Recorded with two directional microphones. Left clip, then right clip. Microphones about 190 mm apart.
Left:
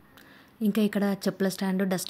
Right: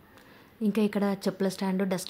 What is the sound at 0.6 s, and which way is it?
Speech, 10° left (ahead or behind).